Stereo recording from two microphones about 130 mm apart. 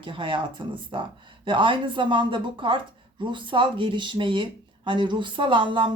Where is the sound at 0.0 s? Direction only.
40° right (ahead or behind).